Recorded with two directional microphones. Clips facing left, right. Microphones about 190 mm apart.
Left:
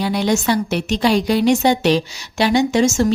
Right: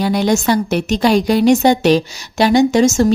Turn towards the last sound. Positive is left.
turn(degrees=-40)  # may be behind; listen again after turning